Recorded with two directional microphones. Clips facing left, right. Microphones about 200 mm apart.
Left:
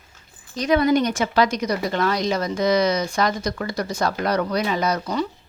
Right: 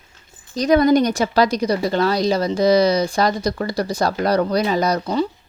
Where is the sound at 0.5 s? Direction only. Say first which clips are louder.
Right 4 dB; 40° right (ahead or behind).